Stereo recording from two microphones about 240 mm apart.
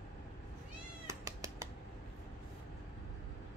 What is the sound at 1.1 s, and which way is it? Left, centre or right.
Cat, centre.